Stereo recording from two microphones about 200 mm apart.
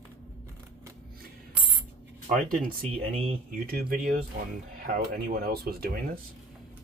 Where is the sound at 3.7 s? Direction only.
50° right (ahead or behind).